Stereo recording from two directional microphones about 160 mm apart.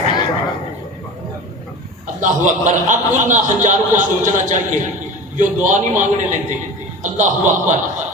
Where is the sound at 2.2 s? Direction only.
50° right (ahead or behind).